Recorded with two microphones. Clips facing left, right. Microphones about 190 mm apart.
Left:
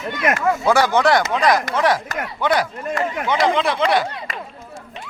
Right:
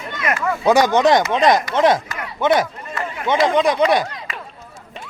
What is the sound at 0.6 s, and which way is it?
Speech, 20° right (ahead or behind).